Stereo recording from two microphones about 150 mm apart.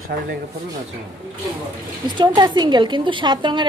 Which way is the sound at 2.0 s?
30° right (ahead or behind).